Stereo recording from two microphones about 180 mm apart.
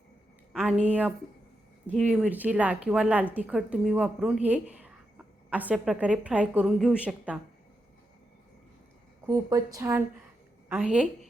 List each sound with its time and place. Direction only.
0.5 s speech: centre (ahead or behind)
9.2 s speech: 20° right (ahead or behind)